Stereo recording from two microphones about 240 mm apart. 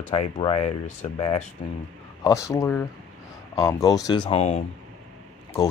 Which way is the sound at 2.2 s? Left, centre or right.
Centre.